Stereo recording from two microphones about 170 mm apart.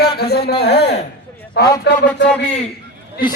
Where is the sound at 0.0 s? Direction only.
70° left (ahead or behind).